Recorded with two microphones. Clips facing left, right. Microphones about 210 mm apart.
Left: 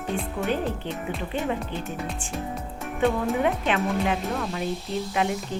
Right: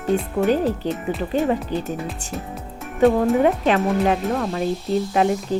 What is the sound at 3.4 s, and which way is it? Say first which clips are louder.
Speech: right 6 dB; 40° right (ahead or behind).